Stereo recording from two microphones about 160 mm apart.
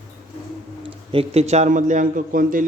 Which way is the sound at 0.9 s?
35° right (ahead or behind).